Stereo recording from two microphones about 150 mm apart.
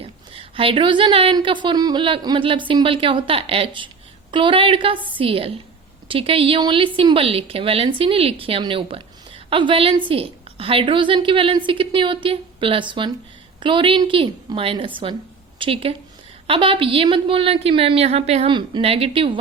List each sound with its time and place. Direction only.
0.0 s a woman's voice: 35° right (ahead or behind)